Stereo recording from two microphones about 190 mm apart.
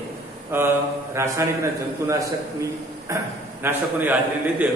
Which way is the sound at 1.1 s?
15° right (ahead or behind).